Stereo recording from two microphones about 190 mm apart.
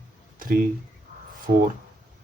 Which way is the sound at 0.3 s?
45° right (ahead or behind).